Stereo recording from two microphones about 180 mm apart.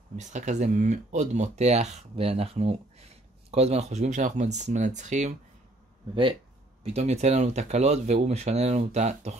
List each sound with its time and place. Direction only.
0.1 s speech: 40° right (ahead or behind)
6.8 s speech: 35° right (ahead or behind)